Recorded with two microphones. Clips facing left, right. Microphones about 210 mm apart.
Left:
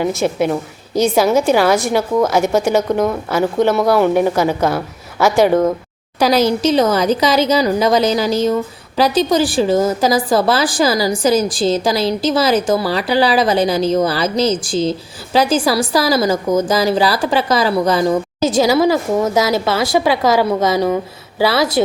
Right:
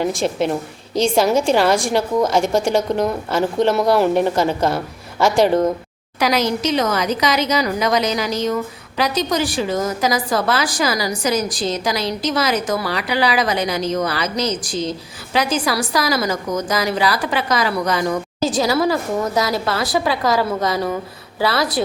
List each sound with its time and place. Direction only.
0.0 s a woman's voice: centre (ahead or behind)
6.1 s speech: 30° left (ahead or behind)
19.5 s a woman's voice: centre (ahead or behind)
19.8 s speech: 25° left (ahead or behind)